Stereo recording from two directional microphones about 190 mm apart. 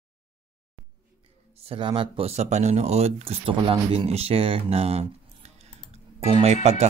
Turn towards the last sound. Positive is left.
turn(degrees=-35)  # may be behind; listen again after turning